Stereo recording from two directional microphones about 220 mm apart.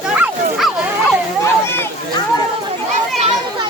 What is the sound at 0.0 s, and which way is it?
Dog, 5° right (ahead or behind).